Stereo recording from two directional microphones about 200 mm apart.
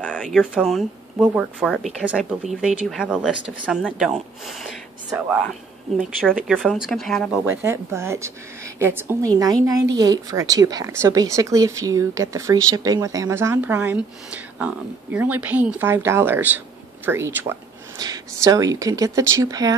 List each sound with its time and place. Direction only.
0.0 s speech: 5° left (ahead or behind)
6.3 s speech: centre (ahead or behind)
7.4 s speech: 10° right (ahead or behind)
15.1 s speech: 10° right (ahead or behind)